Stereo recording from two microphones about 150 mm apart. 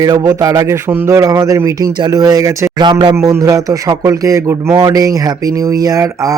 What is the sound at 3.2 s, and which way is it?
Speech, 20° right (ahead or behind).